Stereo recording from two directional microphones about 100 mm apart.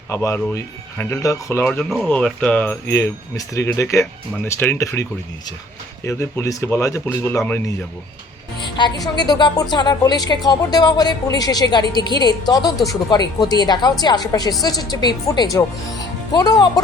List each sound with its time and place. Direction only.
0.1 s speech: 30° left (ahead or behind)
1.8 s speech: 5° right (ahead or behind)
2.0 s speech: 10° left (ahead or behind)
2.9 s speech: 30° left (ahead or behind)
6.1 s speech: 30° left (ahead or behind)
8.8 s a woman's voice: 50° left (ahead or behind)